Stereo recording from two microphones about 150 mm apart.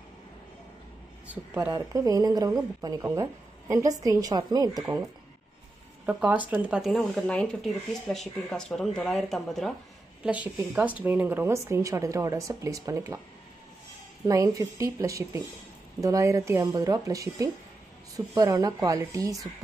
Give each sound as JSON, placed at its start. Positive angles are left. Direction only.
{"t": 1.2, "sound": "speech", "side_deg": -10}
{"t": 1.7, "sound": "speech", "side_deg": -20}
{"t": 6.0, "sound": "speech", "side_deg": -10}
{"t": 10.7, "sound": "speech", "side_deg": -10}
{"t": 14.2, "sound": "speech", "side_deg": -20}